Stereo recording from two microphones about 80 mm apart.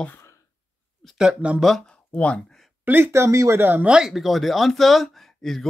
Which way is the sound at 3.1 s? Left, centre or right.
Right.